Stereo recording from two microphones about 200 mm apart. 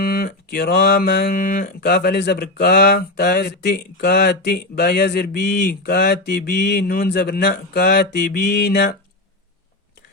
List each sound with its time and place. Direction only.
0.0 s mantra: 50° left (ahead or behind)